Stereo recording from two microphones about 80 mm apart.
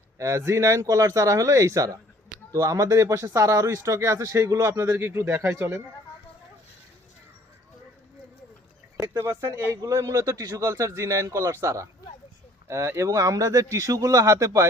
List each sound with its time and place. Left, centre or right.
0.2 s speech: right
9.0 s speech: right